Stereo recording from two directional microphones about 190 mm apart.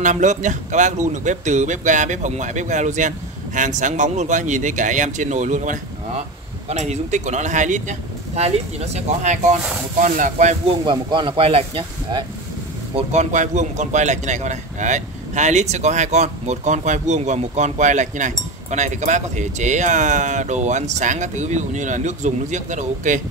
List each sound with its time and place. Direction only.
0.0 s a man's voice: 40° right (ahead or behind)
10.9 s speech: 25° right (ahead or behind)
12.9 s a man's voice: 35° right (ahead or behind)